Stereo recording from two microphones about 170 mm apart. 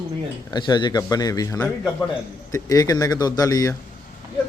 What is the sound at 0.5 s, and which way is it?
A man's voice, 25° left (ahead or behind).